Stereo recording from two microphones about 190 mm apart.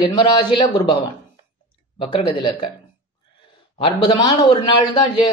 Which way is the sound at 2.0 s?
30° left (ahead or behind).